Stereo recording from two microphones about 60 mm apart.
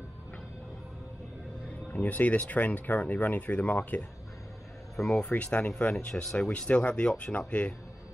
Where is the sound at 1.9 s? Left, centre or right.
Left.